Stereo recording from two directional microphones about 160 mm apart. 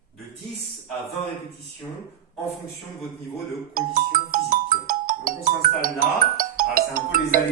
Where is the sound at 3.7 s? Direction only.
60° right (ahead or behind).